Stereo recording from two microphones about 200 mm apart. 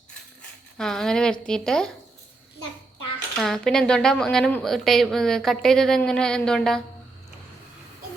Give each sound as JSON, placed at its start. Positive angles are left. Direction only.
{"t": 0.8, "sound": "a woman's voice", "side_deg": 5}
{"t": 3.4, "sound": "a woman's voice", "side_deg": 0}